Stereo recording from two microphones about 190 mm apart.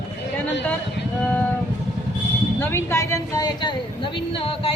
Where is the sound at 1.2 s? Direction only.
5° left (ahead or behind).